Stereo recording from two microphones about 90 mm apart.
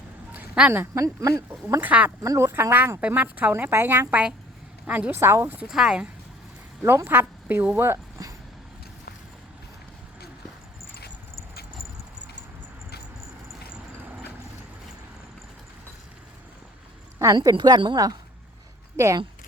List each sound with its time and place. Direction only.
0.3 s a sound: 10° right (ahead or behind)
0.7 s speech: 30° right (ahead or behind)
1.8 s speech: 20° right (ahead or behind)
2.2 s speech: 40° right (ahead or behind)
2.5 s speech: 25° right (ahead or behind)
4.1 s speech: 15° right (ahead or behind)
5.5 s speech: 5° right (ahead or behind)
6.8 s speech: 25° right (ahead or behind)
7.8 s speech: 30° right (ahead or behind)
17.4 s a woman's voice: 50° right (ahead or behind)
17.9 s a woman's voice: 40° right (ahead or behind)